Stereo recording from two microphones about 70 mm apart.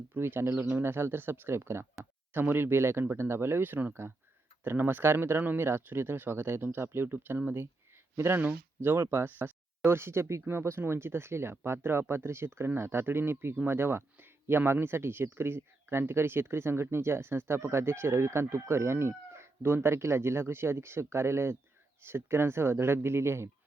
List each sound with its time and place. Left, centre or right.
0.1 s speech: right